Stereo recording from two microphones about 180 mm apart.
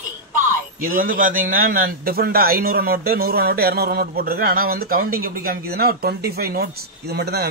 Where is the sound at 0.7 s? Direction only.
50° right (ahead or behind).